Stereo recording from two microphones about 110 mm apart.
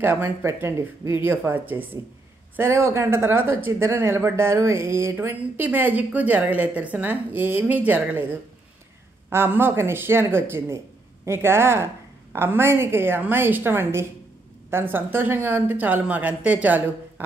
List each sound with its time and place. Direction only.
0.0 s speech: 20° right (ahead or behind)
9.3 s a woman's voice: 20° right (ahead or behind)